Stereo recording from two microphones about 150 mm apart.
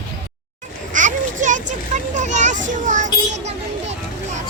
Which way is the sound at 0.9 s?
55° right (ahead or behind).